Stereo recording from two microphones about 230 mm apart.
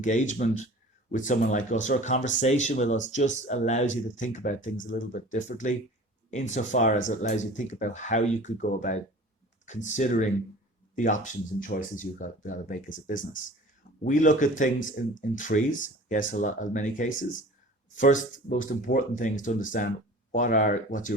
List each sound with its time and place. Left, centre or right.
0.0 s speech: left